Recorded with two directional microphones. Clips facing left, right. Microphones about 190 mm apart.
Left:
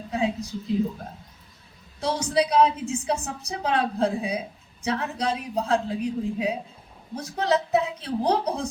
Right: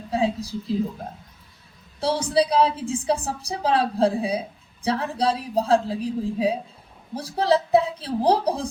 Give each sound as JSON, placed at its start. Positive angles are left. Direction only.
{"t": 0.1, "sound": "a woman's voice", "side_deg": -30}
{"t": 2.0, "sound": "a woman's voice", "side_deg": -30}